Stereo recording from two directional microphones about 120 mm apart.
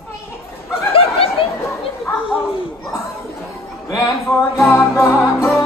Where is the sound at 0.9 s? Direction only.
55° left (ahead or behind).